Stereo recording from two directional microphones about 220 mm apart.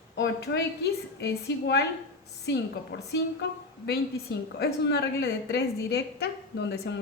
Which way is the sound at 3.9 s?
45° left (ahead or behind).